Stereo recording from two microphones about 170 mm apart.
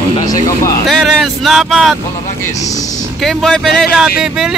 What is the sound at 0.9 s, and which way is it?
Speech, centre (ahead or behind).